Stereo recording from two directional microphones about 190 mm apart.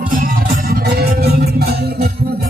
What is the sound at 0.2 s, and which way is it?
Music, 50° right (ahead or behind).